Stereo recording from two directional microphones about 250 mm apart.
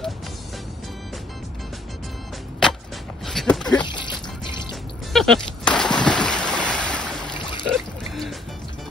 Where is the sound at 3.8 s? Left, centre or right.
Centre.